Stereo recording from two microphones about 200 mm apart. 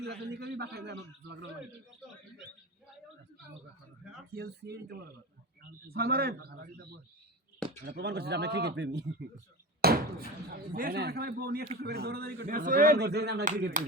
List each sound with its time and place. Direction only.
0.0 s a man's voice: 55° right (ahead or behind)
4.4 s speech: 55° right (ahead or behind)
7.9 s a man's voice: 55° right (ahead or behind)